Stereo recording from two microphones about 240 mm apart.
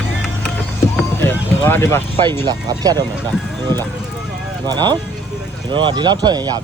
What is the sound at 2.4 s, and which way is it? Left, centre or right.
Speech, centre.